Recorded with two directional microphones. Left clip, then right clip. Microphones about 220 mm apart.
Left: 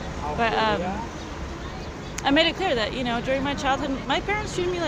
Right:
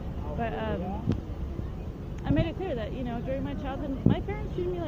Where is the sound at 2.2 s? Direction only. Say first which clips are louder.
Left 10 dB; 25° left (ahead or behind).